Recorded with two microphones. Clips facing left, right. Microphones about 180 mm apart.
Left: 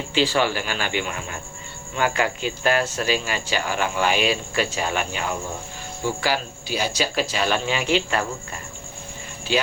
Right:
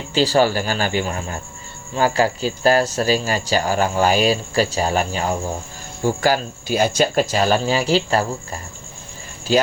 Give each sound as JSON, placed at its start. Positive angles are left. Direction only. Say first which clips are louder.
{"t": 0.1, "sound": "speech", "louder": "right 5 dB", "side_deg": -40}
{"t": 9.5, "sound": "speech", "louder": "right 6 dB", "side_deg": -40}